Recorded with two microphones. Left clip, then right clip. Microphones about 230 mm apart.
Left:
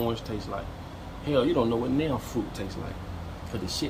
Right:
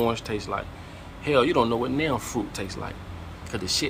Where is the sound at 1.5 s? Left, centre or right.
Right.